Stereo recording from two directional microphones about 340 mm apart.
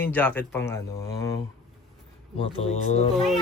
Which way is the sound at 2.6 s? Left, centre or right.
Centre.